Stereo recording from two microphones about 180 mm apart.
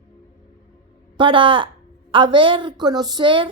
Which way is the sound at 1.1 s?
30° right (ahead or behind).